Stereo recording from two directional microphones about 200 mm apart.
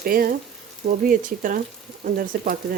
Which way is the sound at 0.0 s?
45° right (ahead or behind).